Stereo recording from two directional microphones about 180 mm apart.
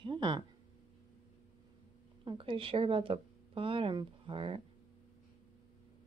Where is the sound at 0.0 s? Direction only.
25° right (ahead or behind).